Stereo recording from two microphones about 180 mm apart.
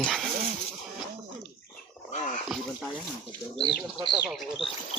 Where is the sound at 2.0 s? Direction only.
40° left (ahead or behind).